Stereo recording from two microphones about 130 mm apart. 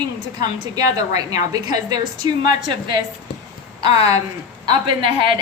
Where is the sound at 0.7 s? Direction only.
30° right (ahead or behind).